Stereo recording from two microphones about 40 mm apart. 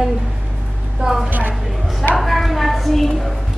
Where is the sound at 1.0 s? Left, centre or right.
Centre.